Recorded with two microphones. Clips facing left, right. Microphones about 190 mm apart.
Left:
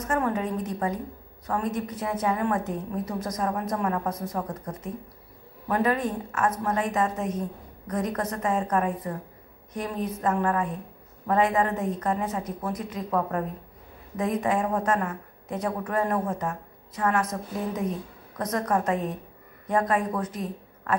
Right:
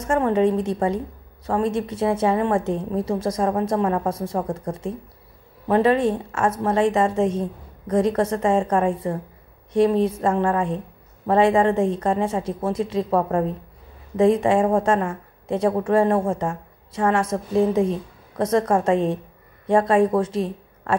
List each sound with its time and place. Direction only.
0.0 s a woman's voice: 25° right (ahead or behind)